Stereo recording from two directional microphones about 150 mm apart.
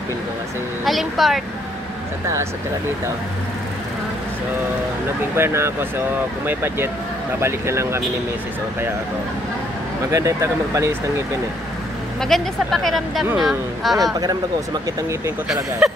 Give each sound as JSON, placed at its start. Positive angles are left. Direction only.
{"t": 0.8, "sound": "speech", "side_deg": 0}
{"t": 5.3, "sound": "speech", "side_deg": -15}
{"t": 10.1, "sound": "speech", "side_deg": -20}
{"t": 12.2, "sound": "speech", "side_deg": 0}
{"t": 14.2, "sound": "speech", "side_deg": -25}
{"t": 15.4, "sound": "speech", "side_deg": -5}